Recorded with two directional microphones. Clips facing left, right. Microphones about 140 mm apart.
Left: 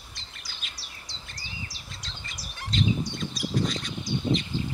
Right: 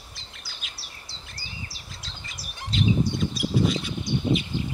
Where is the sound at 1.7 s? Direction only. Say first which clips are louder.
Even; 5° right (ahead or behind).